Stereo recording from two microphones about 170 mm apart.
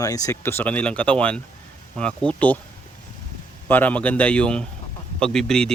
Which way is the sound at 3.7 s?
10° left (ahead or behind).